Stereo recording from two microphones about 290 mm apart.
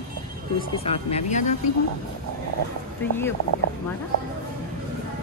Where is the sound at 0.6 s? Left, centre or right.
Left.